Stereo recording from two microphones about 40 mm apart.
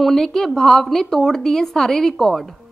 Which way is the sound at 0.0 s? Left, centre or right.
Centre.